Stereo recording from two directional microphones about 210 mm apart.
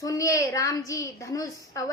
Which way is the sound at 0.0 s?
15° left (ahead or behind).